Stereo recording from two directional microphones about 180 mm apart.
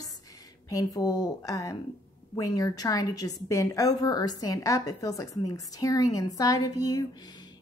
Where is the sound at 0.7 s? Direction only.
20° left (ahead or behind).